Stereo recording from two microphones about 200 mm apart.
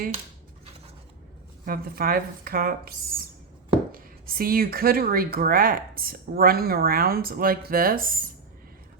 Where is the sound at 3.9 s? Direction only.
45° right (ahead or behind).